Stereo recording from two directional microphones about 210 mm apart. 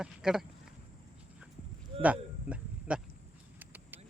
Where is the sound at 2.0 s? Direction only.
5° right (ahead or behind).